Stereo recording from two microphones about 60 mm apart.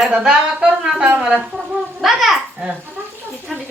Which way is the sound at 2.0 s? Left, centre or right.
Centre.